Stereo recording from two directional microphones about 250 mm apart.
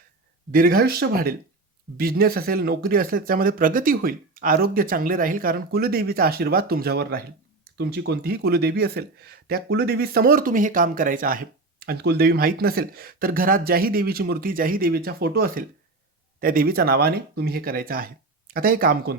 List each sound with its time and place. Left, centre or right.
0.5 s speech: right